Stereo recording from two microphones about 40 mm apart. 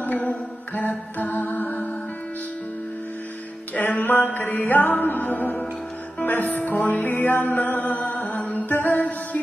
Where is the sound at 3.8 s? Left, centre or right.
Left.